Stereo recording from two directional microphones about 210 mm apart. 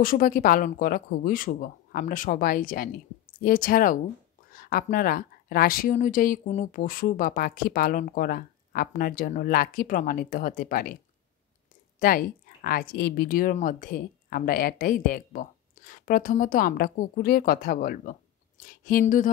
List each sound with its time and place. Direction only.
0.0 s a woman's voice: 40° left (ahead or behind)
12.0 s a woman's voice: 45° left (ahead or behind)